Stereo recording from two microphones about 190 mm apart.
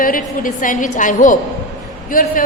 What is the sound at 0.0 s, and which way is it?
A woman's voice, 45° left (ahead or behind).